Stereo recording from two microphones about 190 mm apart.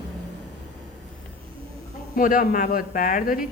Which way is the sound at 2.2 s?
45° left (ahead or behind).